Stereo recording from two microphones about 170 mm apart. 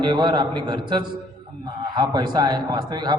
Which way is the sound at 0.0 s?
25° right (ahead or behind).